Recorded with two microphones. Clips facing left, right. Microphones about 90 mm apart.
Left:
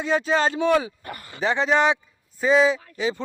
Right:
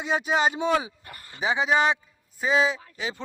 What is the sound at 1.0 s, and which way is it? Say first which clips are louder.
Speech: left 8 dB; 75° left (ahead or behind).